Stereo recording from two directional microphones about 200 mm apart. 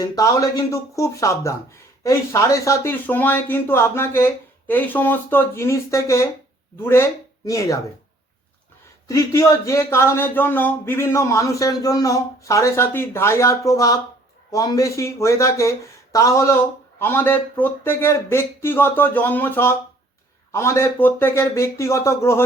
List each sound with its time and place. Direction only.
0.0 s speech: 15° left (ahead or behind)
9.0 s speech: 15° left (ahead or behind)